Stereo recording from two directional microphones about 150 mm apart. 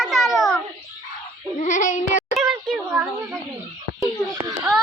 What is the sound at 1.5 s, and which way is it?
Child singing, 55° left (ahead or behind).